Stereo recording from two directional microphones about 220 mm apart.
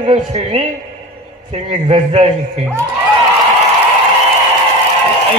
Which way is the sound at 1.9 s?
30° right (ahead or behind).